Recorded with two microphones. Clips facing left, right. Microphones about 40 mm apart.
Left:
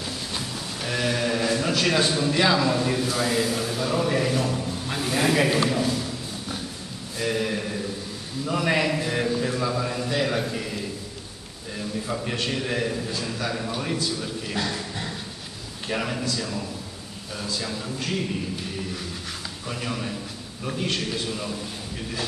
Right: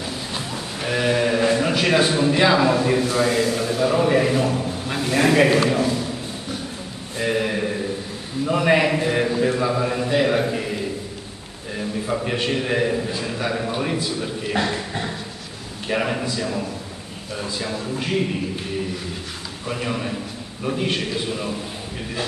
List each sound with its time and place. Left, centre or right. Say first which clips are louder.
0.8 s a man's voice: right 5 dB; centre
7.2 s a sound: right 4 dB; right
8.5 s a man's voice: right 5 dB; centre
19.7 s a man's voice: right 5 dB; centre